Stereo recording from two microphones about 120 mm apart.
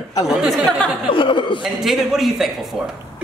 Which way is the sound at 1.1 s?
45° left (ahead or behind).